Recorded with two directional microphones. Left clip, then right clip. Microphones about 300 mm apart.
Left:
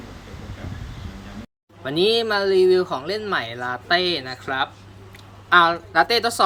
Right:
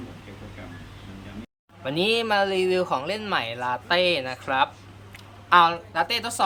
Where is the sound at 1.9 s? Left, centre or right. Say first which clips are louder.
Left 3 dB; centre.